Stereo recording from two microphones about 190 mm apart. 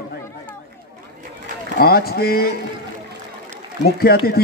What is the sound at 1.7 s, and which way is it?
Speech, 50° left (ahead or behind).